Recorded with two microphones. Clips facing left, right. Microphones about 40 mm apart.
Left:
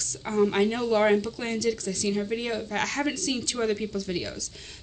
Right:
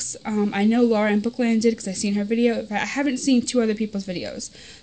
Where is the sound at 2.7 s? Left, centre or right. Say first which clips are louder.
Right 4 dB; right.